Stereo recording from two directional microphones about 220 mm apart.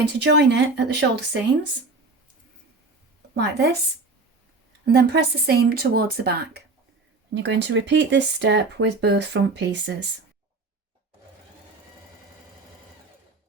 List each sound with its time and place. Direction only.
0.0 s speech: 50° right (ahead or behind)
3.3 s speech: 45° right (ahead or behind)
4.9 s speech: 45° right (ahead or behind)